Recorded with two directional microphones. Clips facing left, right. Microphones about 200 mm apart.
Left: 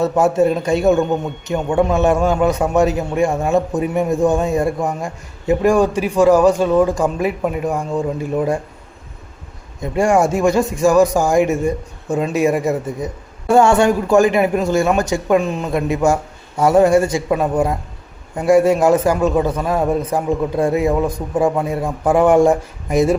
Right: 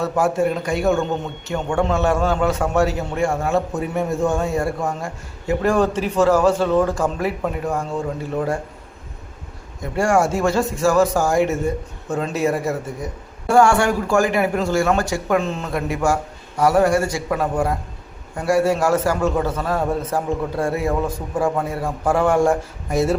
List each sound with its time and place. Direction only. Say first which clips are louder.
0.0 s a man's voice: left 5 dB; 25° left (ahead or behind)
9.8 s a man's voice: left 3 dB; 20° left (ahead or behind)